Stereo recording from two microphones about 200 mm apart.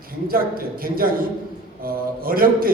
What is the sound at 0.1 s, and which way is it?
A man's voice, 45° right (ahead or behind).